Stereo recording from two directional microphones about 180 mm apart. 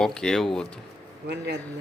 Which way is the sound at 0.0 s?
5° left (ahead or behind).